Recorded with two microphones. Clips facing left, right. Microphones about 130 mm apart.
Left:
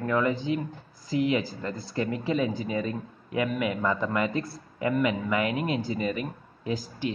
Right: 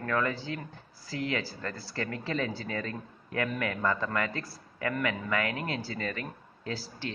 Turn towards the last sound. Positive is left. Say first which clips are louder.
# left 6 dB
turn(degrees=15)  # may be behind; listen again after turning